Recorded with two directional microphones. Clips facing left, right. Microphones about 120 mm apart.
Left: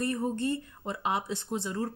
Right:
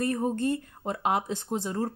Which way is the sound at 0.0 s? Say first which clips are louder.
Right 3 dB; 50° right (ahead or behind).